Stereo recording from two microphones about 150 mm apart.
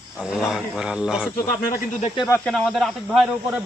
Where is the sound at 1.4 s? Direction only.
65° left (ahead or behind).